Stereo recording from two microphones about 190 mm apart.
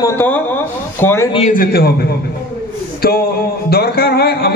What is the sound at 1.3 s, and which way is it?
A man's voice, 40° left (ahead or behind).